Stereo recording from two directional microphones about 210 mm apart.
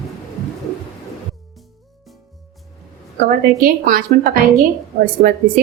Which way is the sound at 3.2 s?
45° right (ahead or behind).